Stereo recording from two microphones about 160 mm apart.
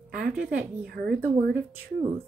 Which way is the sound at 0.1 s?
65° right (ahead or behind).